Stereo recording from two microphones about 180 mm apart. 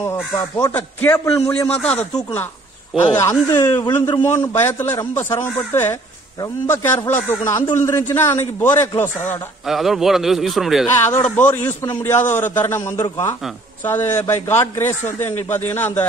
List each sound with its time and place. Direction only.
0.0 s a man's voice: 15° left (ahead or behind)
1.5 s a man's voice: 5° left (ahead or behind)
3.0 s a man's voice: 15° left (ahead or behind)
9.7 s a man's voice: centre (ahead or behind)
10.9 s a man's voice: 10° left (ahead or behind)